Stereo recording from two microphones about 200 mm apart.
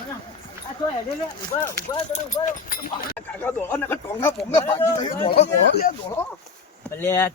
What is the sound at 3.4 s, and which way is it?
Speech, 10° left (ahead or behind).